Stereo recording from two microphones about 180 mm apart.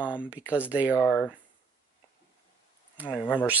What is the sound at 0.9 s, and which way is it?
Speech, 15° left (ahead or behind).